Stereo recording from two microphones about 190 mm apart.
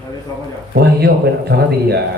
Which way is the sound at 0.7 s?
55° right (ahead or behind).